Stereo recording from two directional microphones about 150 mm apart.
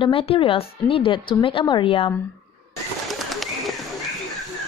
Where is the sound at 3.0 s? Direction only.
Centre (ahead or behind).